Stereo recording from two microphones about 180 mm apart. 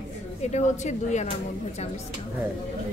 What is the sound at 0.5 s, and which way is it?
Speech, 40° left (ahead or behind).